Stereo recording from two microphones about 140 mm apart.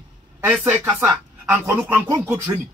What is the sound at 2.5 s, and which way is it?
Speech, 30° right (ahead or behind).